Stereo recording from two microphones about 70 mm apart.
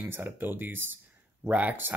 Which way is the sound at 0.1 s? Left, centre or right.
Right.